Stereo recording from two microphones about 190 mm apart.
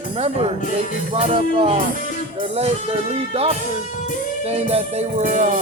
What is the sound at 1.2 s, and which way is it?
Music, 30° right (ahead or behind).